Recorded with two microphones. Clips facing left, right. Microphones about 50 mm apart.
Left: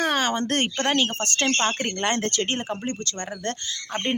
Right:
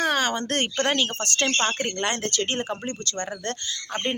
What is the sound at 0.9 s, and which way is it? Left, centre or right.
Speech, centre.